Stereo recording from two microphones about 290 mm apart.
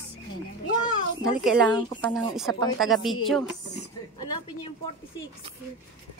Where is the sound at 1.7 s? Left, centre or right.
Centre.